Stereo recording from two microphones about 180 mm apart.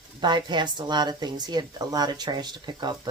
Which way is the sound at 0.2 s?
25° right (ahead or behind).